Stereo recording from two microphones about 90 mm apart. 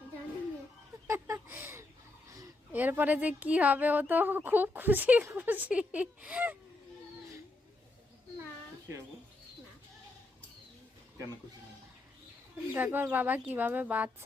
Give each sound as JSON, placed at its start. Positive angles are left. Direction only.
{"t": 1.0, "sound": "a sound", "side_deg": -35}
{"t": 2.7, "sound": "speech", "side_deg": -20}
{"t": 12.7, "sound": "speech", "side_deg": -20}